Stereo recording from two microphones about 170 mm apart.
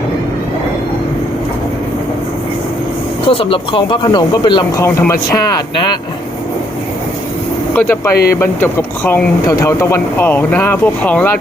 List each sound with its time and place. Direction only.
3.2 s speech: 30° left (ahead or behind)
7.8 s speech: 10° left (ahead or behind)
8.1 s speech: 65° left (ahead or behind)
8.4 s speech: 15° left (ahead or behind)